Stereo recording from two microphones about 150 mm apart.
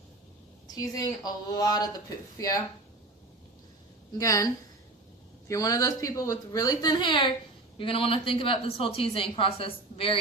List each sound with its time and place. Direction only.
0.7 s a woman's voice: 25° left (ahead or behind)
4.2 s a woman's voice: 20° left (ahead or behind); by 10.2 s 40° left (ahead or behind)